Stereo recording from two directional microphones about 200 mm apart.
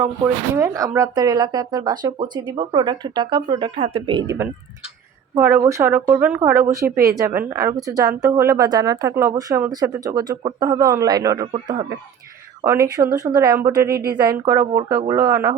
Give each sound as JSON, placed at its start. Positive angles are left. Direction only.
{"t": 0.5, "sound": "speech", "side_deg": -15}
{"t": 6.8, "sound": "speech", "side_deg": -50}
{"t": 7.2, "sound": "speech", "side_deg": -15}
{"t": 12.6, "sound": "speech", "side_deg": -15}
{"t": 13.8, "sound": "speech", "side_deg": -50}
{"t": 14.2, "sound": "speech", "side_deg": -20}